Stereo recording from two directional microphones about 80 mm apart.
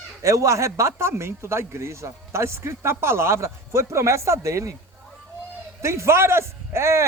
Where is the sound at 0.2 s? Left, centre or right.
Right.